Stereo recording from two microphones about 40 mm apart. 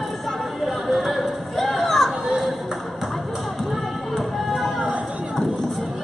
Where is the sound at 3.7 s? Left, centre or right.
Centre.